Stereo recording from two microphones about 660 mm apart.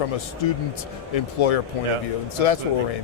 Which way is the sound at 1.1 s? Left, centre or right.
Left.